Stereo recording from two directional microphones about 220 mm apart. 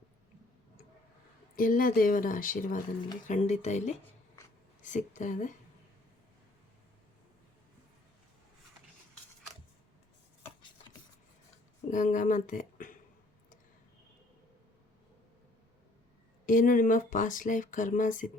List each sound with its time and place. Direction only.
1.5 s speech: 40° left (ahead or behind)
11.9 s speech: 35° left (ahead or behind)
16.5 s speech: 35° left (ahead or behind)